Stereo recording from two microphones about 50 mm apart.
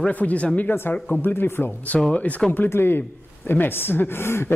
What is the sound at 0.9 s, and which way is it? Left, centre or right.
Speech, left.